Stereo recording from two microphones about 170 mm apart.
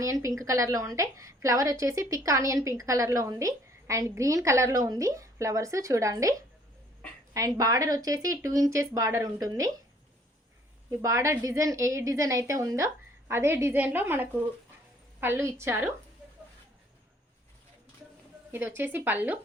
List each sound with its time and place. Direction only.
0.0 s a woman's voice: 20° right (ahead or behind)
7.3 s a woman's voice: 20° right (ahead or behind)
11.0 s a woman's voice: 15° right (ahead or behind)
18.5 s a woman's voice: 10° right (ahead or behind)